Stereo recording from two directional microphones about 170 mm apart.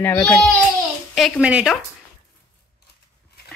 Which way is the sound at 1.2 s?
5° right (ahead or behind).